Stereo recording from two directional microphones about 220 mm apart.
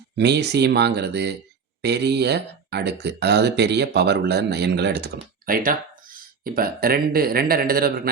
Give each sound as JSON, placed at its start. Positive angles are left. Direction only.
{"t": 0.2, "sound": "speech", "side_deg": -50}